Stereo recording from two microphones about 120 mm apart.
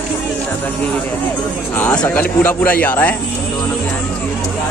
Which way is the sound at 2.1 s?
10° left (ahead or behind).